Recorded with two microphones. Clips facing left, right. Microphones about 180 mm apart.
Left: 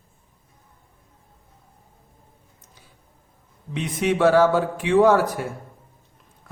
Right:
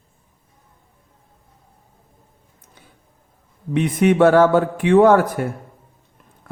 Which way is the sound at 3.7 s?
55° right (ahead or behind).